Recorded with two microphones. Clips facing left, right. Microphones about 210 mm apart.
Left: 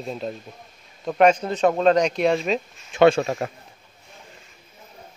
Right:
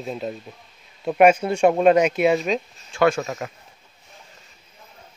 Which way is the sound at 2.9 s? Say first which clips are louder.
Left 4 dB; 25° left (ahead or behind).